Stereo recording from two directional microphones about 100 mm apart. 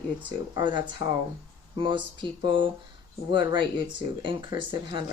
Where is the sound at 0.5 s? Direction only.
50° right (ahead or behind).